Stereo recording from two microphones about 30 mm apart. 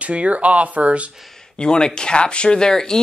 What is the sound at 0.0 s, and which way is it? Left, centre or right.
Speech, right.